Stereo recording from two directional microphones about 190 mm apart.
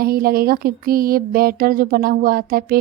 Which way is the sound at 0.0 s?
50° right (ahead or behind).